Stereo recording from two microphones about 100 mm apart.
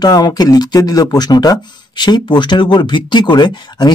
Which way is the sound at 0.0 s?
40° left (ahead or behind).